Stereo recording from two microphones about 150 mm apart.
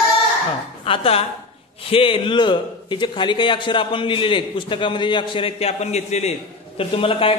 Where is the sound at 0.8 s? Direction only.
35° left (ahead or behind).